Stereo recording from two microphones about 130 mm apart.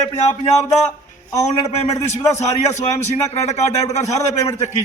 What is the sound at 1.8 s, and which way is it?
A man's voice, 55° left (ahead or behind).